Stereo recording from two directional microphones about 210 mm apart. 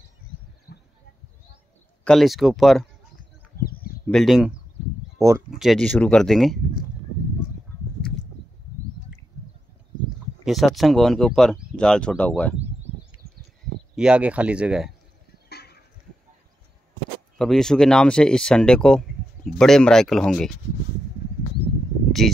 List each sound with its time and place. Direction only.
0.7 s a sound: 45° left (ahead or behind)
2.0 s speech: centre (ahead or behind)
4.1 s speech: centre (ahead or behind)
10.4 s speech: centre (ahead or behind)
13.9 s speech: 5° right (ahead or behind)
15.5 s a sound: 50° left (ahead or behind)
17.4 s speech: 5° left (ahead or behind)
22.2 s speech: centre (ahead or behind)